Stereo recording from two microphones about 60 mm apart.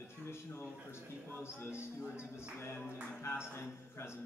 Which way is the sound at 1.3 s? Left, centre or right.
Left.